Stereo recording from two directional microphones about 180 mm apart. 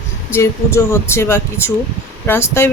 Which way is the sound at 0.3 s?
15° left (ahead or behind).